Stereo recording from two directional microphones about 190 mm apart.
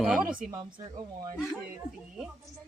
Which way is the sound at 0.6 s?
25° right (ahead or behind).